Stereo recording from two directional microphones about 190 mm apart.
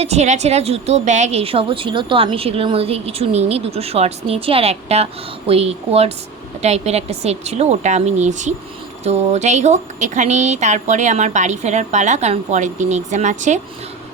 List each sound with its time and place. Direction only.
0.0 s a woman's voice: 35° right (ahead or behind)